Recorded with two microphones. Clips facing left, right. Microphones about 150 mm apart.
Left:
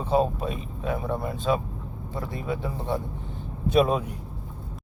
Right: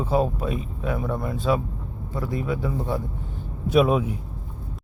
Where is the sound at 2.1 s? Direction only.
25° left (ahead or behind).